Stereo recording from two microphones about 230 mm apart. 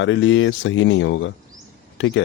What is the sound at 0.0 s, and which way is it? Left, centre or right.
Speech, left.